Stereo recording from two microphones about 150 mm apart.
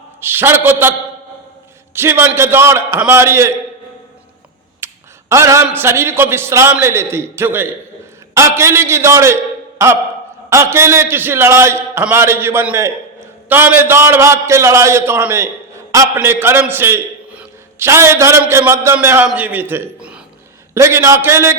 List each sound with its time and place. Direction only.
0.2 s a man's voice: 15° right (ahead or behind)
2.0 s a man's voice: 15° right (ahead or behind)
4.8 s a sound: 15° right (ahead or behind)
5.3 s a man's voice: 20° right (ahead or behind)
20.7 s a man's voice: 20° right (ahead or behind)